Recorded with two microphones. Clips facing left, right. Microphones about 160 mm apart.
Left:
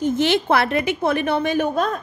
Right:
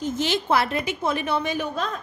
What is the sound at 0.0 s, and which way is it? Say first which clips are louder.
A woman's voice: left 6 dB; 65° left (ahead or behind).